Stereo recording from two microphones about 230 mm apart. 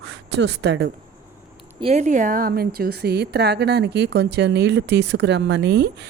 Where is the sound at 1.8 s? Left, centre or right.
Right.